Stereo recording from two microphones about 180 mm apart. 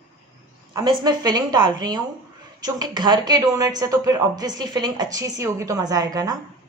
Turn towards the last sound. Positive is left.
turn(degrees=-20)  # may be behind; listen again after turning